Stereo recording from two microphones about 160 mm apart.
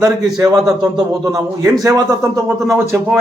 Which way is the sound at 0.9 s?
25° right (ahead or behind).